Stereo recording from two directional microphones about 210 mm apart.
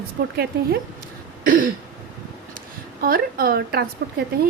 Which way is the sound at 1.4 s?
40° right (ahead or behind).